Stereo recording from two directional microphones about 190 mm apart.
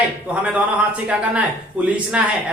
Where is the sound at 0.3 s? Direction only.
5° right (ahead or behind).